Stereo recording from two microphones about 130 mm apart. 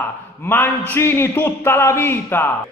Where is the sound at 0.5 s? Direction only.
15° left (ahead or behind).